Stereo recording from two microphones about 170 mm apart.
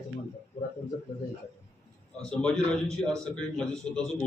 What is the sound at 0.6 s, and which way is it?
Speech, 40° left (ahead or behind).